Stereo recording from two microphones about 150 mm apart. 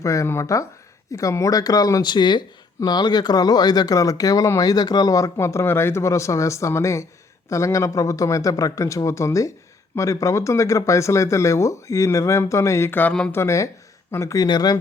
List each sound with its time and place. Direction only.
0.0 s speech: 20° left (ahead or behind)
13.3 s speech: 20° left (ahead or behind)